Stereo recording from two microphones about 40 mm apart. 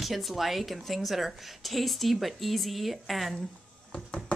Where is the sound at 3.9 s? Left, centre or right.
Left.